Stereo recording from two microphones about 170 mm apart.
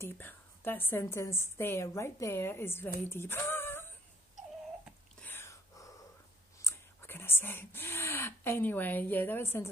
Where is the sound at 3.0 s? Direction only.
15° left (ahead or behind).